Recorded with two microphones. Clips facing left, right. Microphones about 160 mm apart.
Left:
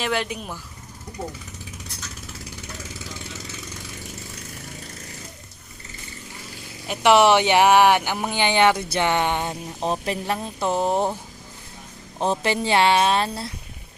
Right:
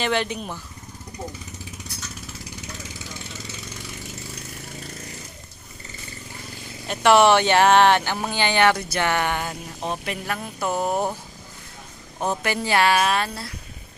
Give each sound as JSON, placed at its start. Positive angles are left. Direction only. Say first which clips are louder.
{"t": 0.0, "sound": "speech", "louder": "right 2 dB", "side_deg": 5}
{"t": 6.8, "sound": "speech", "louder": "even", "side_deg": 15}
{"t": 9.8, "sound": "speech", "louder": "left 4 dB", "side_deg": 35}
{"t": 12.2, "sound": "speech", "louder": "left 2 dB", "side_deg": 30}